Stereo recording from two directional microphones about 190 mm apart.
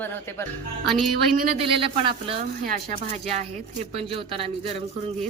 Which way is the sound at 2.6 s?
40° right (ahead or behind).